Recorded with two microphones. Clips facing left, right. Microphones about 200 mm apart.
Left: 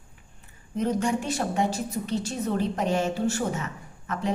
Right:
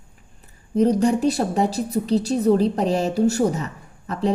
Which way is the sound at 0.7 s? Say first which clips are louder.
Right 8 dB; 35° right (ahead or behind).